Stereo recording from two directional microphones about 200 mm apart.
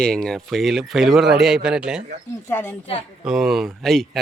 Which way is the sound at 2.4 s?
10° left (ahead or behind).